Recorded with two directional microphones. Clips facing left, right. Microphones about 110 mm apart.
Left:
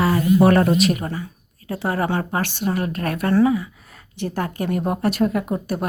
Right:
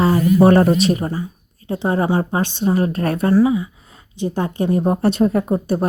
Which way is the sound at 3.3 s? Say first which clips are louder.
Right 2 dB; 10° right (ahead or behind).